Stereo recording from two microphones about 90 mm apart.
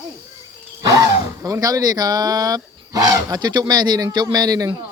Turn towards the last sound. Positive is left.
turn(degrees=-45)  # may be behind; listen again after turning